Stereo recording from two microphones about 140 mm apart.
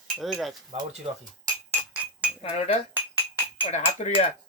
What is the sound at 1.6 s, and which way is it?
Music, 10° right (ahead or behind).